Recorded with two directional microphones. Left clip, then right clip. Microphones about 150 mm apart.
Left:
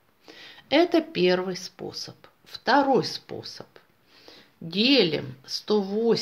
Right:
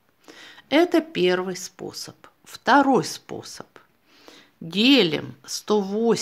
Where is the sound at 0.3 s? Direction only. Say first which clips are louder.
Right 1 dB; 35° right (ahead or behind).